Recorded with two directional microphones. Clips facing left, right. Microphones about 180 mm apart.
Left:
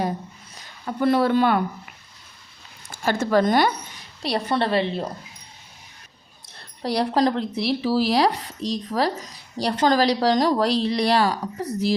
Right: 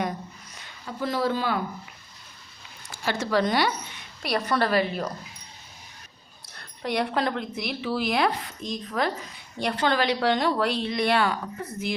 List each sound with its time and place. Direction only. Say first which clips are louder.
0.9 s speech: left 7 dB; 60° left (ahead or behind)
3.0 s a woman's voice: left 5 dB; 45° left (ahead or behind)
4.2 s a woman's voice: left 2 dB; 30° left (ahead or behind)
6.8 s speech: left 5 dB; 35° left (ahead or behind)